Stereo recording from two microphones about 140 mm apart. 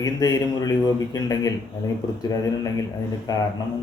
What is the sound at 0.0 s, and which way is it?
A man's voice, 30° left (ahead or behind).